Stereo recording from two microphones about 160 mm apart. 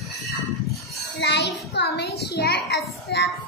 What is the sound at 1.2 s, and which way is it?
A child's voice, 90° left.